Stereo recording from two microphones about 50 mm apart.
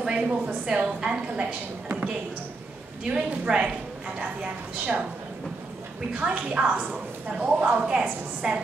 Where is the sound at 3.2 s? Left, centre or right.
Centre.